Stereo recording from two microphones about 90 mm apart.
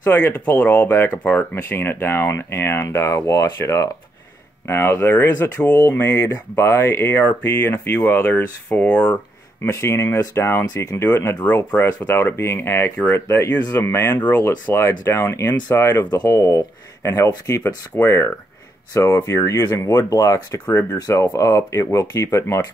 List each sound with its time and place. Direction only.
0.0 s speech: 20° left (ahead or behind)
5.9 s speech: 30° left (ahead or behind)
9.7 s speech: 30° left (ahead or behind)
11.4 s speech: 15° left (ahead or behind)
16.1 s speech: 50° left (ahead or behind)
16.3 s speech: 35° left (ahead or behind)
17.9 s speech: 30° left (ahead or behind)
20.6 s speech: 25° left (ahead or behind)